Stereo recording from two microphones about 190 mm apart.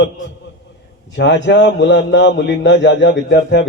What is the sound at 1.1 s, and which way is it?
A man's voice, 65° left (ahead or behind).